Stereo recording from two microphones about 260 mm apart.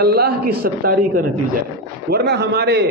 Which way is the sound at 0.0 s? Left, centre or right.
Right.